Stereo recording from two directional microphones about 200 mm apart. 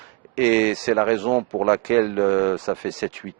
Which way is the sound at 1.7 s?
15° right (ahead or behind).